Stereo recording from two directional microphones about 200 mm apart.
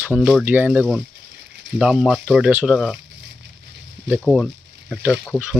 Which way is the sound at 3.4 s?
65° right (ahead or behind).